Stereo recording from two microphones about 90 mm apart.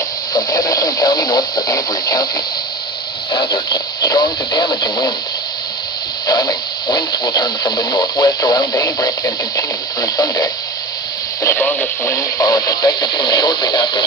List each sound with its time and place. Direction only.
0.3 s speech: 45° left (ahead or behind)
6.2 s speech: 45° left (ahead or behind)
11.6 s speech: 15° left (ahead or behind)
12.0 s speech: 35° left (ahead or behind); by 14.0 s 55° left (ahead or behind)